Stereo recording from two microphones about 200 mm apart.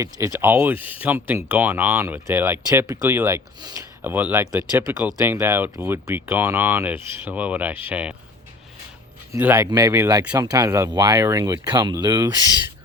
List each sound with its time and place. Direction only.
0.0 s speech: 15° right (ahead or behind)
9.3 s speech: 10° right (ahead or behind)